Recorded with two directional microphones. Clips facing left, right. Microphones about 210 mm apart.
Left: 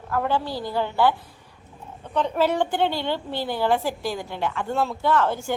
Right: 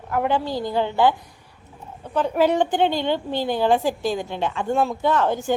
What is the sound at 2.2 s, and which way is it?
A woman's voice, 10° right (ahead or behind).